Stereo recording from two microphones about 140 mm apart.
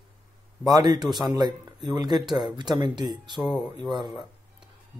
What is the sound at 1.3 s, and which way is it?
Speech, 30° right (ahead or behind).